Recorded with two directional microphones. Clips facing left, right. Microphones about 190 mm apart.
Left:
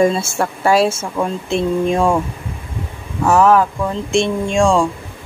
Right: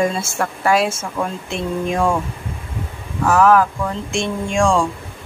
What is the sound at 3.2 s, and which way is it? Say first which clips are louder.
Speech: left 1 dB; 25° left (ahead or behind).